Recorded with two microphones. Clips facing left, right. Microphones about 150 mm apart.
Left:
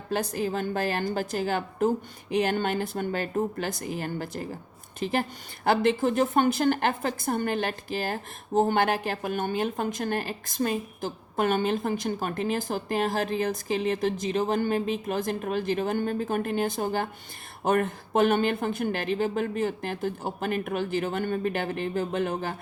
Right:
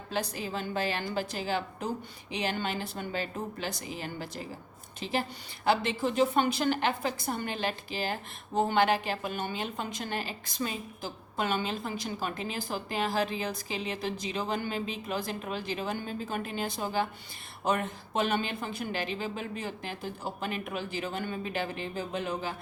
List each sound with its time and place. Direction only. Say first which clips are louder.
0.1 s a woman's voice: left 6 dB; 50° left (ahead or behind)